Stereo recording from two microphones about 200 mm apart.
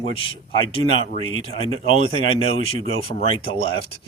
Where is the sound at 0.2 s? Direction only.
25° left (ahead or behind).